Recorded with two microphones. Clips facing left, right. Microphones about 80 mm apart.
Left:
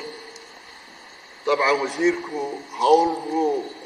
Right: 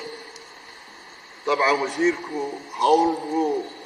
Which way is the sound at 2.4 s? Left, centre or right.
Centre.